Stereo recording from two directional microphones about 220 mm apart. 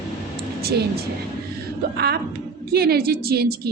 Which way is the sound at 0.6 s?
45° right (ahead or behind).